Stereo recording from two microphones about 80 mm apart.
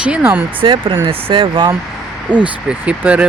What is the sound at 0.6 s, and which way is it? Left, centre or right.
Speech, right.